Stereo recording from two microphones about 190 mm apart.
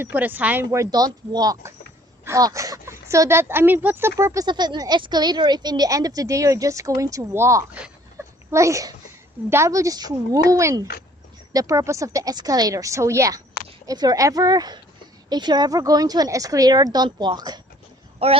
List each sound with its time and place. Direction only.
0.0 s speech: 10° right (ahead or behind)